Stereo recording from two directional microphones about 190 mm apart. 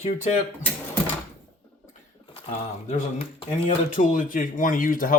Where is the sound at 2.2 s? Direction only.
25° left (ahead or behind).